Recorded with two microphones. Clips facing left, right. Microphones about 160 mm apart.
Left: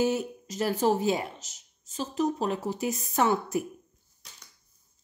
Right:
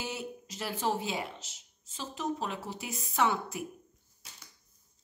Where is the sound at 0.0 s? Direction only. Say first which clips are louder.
Left 12 dB; 45° left (ahead or behind).